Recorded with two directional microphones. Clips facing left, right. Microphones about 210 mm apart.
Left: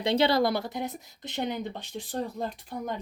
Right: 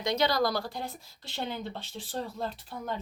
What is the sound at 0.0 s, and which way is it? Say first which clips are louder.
Speech: left 4 dB; 30° left (ahead or behind).